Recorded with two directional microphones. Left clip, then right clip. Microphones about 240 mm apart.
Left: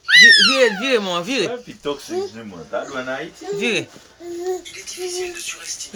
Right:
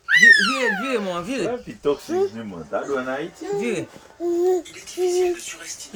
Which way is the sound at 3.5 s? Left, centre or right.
Centre.